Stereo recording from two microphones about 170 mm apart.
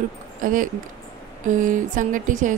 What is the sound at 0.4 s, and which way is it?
A woman's voice, 55° right (ahead or behind).